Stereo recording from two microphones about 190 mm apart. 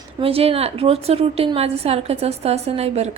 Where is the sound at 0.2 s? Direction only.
30° right (ahead or behind).